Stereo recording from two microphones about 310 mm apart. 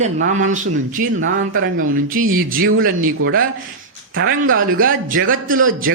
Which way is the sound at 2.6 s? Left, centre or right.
Right.